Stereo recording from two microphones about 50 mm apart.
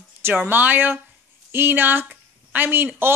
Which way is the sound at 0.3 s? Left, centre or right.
Right.